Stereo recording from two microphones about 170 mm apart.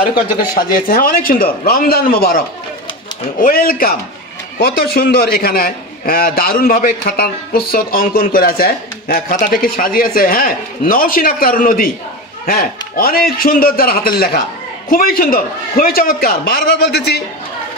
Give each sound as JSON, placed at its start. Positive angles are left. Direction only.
{"t": 0.6, "sound": "a man's voice", "side_deg": 60}